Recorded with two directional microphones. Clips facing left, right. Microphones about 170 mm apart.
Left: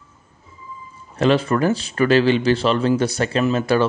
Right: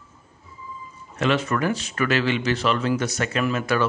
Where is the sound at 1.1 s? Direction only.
35° left (ahead or behind).